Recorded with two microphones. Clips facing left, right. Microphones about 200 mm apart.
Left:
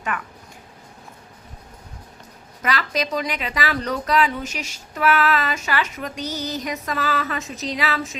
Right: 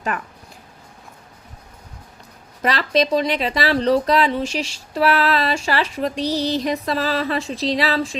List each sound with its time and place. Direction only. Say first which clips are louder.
0.1 s speech: right 1 dB; 35° right (ahead or behind)
2.6 s speech: right 5 dB; 35° right (ahead or behind)